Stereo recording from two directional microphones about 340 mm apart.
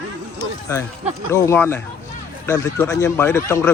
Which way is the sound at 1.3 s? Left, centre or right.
Centre.